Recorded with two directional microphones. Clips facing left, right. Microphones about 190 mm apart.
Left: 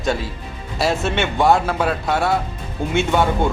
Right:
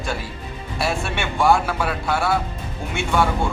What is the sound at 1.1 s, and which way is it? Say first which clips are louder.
Speech: left 1 dB; 20° left (ahead or behind).